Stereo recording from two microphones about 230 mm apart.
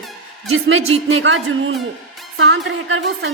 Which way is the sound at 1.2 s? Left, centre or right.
Right.